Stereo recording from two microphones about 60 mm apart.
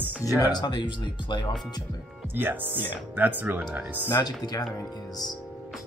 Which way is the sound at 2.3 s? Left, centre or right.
Right.